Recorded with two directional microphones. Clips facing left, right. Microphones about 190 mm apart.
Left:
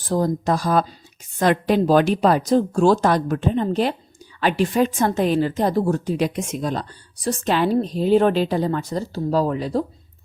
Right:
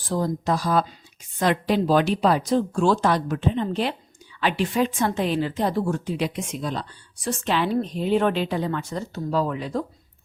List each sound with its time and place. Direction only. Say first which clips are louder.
0.1 s a woman's voice: left 4 dB; 45° left (ahead or behind)